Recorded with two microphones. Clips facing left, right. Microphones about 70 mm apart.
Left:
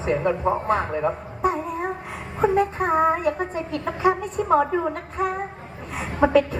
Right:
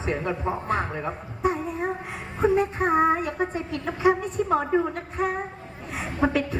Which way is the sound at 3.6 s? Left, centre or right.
Left.